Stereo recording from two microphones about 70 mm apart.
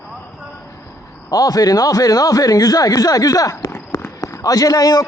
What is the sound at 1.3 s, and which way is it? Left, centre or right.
A man's voice, left.